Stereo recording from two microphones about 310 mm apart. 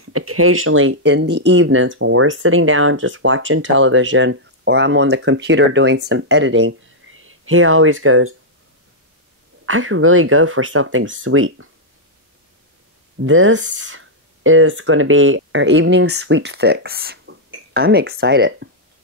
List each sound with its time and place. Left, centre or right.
0.0 s speech: right
9.7 s speech: right
13.2 s speech: right